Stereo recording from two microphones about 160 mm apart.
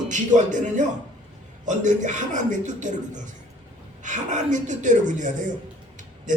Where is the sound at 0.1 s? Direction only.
50° right (ahead or behind).